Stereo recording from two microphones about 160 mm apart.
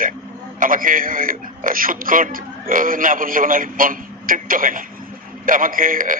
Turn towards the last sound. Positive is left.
turn(degrees=-60)  # may be behind; listen again after turning